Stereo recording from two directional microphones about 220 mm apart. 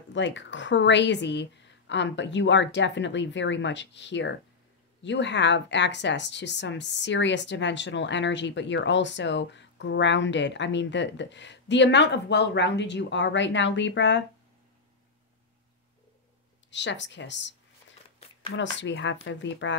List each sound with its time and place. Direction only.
0.1 s a woman's voice: 55° left (ahead or behind)
16.7 s a woman's voice: 55° left (ahead or behind)